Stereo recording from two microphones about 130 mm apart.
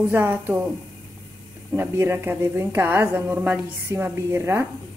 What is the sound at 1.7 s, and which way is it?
A woman's voice, 15° right (ahead or behind).